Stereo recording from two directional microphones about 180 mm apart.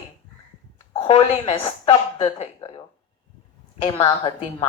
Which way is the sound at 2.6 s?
25° left (ahead or behind).